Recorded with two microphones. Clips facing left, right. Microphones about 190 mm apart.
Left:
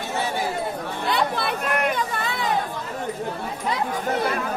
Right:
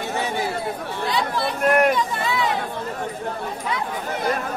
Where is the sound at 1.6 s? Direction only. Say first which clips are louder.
Right 9 dB; 50° right (ahead or behind).